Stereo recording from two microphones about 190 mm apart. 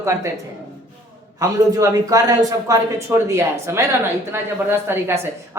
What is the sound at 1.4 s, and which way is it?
Speech, 20° right (ahead or behind).